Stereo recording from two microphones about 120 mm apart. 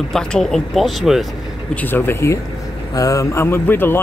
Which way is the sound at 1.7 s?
15° left (ahead or behind).